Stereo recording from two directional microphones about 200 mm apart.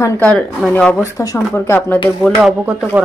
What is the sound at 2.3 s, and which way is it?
Speech, 5° right (ahead or behind).